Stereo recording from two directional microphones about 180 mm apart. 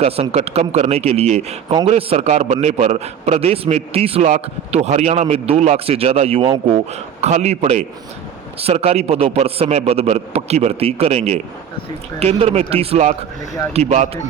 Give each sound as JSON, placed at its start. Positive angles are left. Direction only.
{"t": 0.0, "sound": "a man's voice", "side_deg": -35}